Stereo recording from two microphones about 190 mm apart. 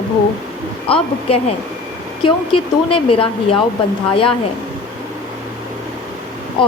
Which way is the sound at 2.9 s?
30° left (ahead or behind).